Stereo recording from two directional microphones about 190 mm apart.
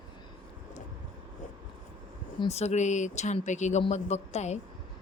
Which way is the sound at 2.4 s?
35° left (ahead or behind).